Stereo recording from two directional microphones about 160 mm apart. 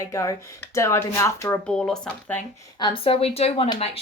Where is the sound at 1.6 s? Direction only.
5° left (ahead or behind).